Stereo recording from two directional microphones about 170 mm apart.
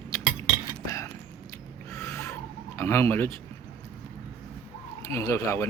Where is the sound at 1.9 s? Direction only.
15° left (ahead or behind).